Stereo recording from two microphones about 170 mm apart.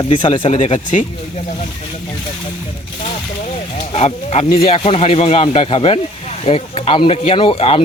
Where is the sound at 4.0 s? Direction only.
40° left (ahead or behind).